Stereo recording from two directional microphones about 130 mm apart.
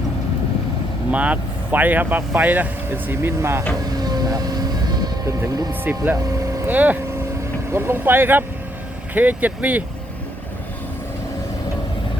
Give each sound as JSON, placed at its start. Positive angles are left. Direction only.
{"t": 1.1, "sound": "speech", "side_deg": -10}
{"t": 4.0, "sound": "vehicle", "side_deg": -30}
{"t": 5.4, "sound": "speech", "side_deg": -30}
{"t": 5.8, "sound": "speech", "side_deg": -15}